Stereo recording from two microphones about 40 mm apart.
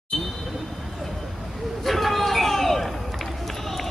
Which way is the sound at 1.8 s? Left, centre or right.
Centre.